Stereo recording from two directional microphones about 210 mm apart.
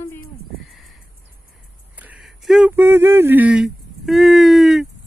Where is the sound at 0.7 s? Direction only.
Centre (ahead or behind).